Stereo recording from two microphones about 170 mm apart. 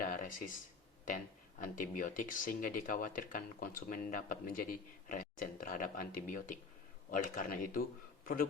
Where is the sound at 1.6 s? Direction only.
50° left (ahead or behind).